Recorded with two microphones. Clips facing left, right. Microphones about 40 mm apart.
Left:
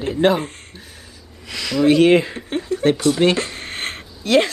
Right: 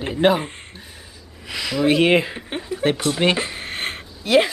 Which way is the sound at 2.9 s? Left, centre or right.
Centre.